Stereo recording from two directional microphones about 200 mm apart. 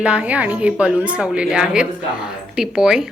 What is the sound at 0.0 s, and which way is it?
A woman's voice, 5° right (ahead or behind).